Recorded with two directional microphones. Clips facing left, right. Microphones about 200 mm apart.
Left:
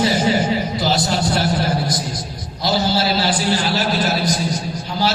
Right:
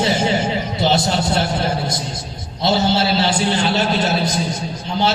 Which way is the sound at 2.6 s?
25° right (ahead or behind).